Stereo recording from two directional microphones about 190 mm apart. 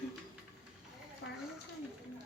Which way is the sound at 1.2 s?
70° left (ahead or behind).